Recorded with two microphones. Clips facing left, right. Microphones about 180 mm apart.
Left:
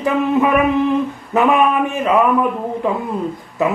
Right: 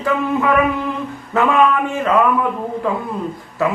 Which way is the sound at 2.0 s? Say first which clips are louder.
Left 1 dB; 20° left (ahead or behind).